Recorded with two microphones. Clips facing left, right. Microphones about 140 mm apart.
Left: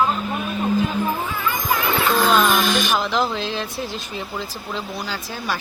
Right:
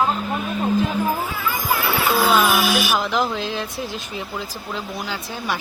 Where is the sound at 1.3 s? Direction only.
10° right (ahead or behind).